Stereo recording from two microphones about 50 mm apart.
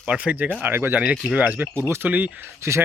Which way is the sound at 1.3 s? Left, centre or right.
Right.